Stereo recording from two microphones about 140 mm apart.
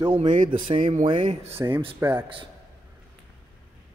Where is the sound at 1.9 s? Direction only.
15° right (ahead or behind).